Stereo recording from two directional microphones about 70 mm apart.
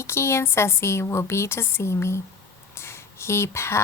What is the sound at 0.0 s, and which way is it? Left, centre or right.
A woman's voice, left.